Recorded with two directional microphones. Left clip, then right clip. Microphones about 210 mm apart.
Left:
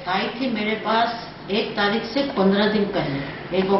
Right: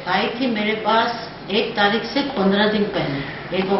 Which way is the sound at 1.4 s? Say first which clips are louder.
Right 3 dB; centre (ahead or behind).